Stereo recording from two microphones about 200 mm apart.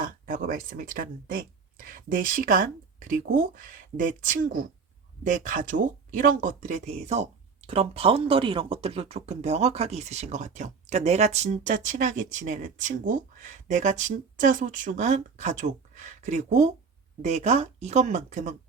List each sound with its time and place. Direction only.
0.3 s speech: 45° right (ahead or behind)